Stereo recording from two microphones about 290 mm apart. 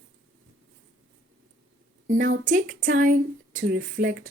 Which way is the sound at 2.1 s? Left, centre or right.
Right.